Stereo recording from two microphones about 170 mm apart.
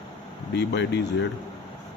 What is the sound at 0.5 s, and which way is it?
Speech, 90° left.